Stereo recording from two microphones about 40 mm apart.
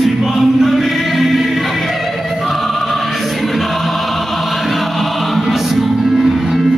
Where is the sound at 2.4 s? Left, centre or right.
Centre.